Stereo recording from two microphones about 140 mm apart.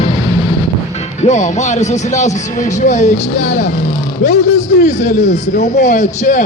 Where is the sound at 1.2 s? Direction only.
60° left (ahead or behind).